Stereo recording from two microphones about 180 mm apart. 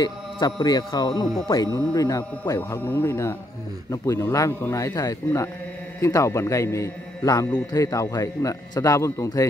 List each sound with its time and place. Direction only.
0.0 s a man's voice: 25° left (ahead or behind)